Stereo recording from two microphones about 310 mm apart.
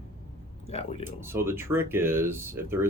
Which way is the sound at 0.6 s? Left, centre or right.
Centre.